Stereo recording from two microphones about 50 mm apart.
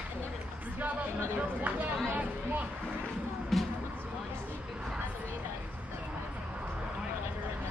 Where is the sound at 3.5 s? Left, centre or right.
Centre.